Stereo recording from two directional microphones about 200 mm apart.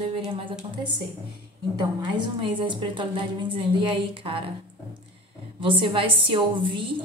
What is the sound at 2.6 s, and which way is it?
A woman's voice, 25° right (ahead or behind).